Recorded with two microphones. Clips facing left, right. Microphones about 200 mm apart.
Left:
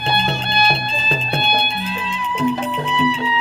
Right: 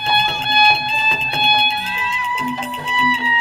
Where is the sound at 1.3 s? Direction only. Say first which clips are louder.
Right 1 dB; 55° left (ahead or behind).